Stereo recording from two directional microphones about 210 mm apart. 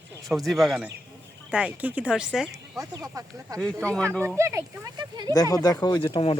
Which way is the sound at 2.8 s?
15° right (ahead or behind).